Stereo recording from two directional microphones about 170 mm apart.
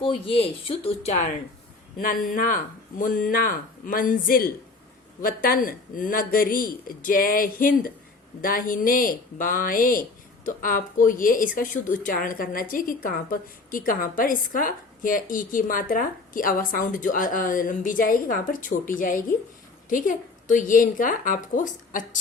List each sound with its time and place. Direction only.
0.0 s speech: 30° left (ahead or behind)
2.0 s a woman's voice: 55° left (ahead or behind)